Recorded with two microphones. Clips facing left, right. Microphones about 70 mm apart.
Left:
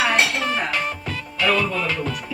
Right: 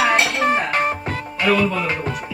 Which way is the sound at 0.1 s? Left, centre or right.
Right.